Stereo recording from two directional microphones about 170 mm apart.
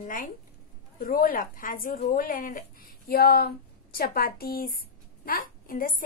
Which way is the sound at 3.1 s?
65° left (ahead or behind).